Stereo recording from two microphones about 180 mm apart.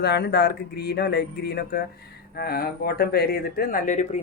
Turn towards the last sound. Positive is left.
turn(degrees=40)  # may be behind; listen again after turning